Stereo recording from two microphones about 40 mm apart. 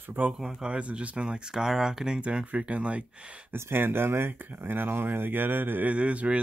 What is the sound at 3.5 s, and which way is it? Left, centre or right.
Speech, right.